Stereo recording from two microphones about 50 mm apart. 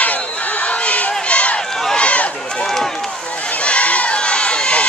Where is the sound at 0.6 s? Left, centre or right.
Left.